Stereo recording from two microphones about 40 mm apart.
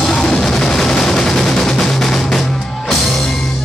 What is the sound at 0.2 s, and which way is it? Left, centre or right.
Music, centre.